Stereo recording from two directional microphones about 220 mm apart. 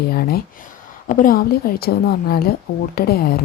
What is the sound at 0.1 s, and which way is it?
A woman's voice, 45° left (ahead or behind).